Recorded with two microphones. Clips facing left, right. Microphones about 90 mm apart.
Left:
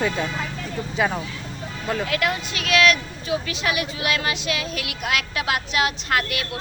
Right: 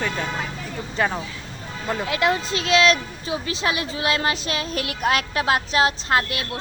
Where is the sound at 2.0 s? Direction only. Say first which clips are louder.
Right 3 dB; 25° right (ahead or behind).